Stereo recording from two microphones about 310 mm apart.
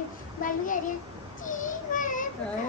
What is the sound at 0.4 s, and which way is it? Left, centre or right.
Speech, left.